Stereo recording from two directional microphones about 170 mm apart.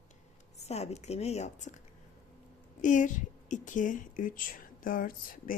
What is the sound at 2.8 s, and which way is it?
A woman's voice, 50° left (ahead or behind).